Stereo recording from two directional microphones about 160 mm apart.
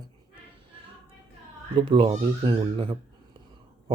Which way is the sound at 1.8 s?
30° right (ahead or behind).